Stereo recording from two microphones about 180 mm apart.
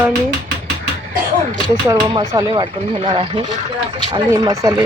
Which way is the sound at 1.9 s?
20° right (ahead or behind).